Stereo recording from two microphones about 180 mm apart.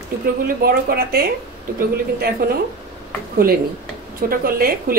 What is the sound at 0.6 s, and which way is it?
Speech, 60° right (ahead or behind).